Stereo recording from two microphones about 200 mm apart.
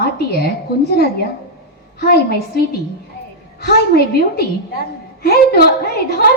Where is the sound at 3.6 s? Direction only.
50° left (ahead or behind).